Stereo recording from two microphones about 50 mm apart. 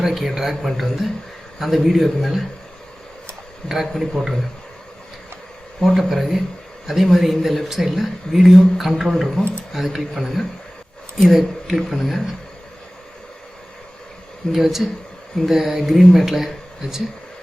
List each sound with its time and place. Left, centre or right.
0.0 s speech: centre
3.9 s speech: centre
5.8 s speech: centre
14.5 s speech: centre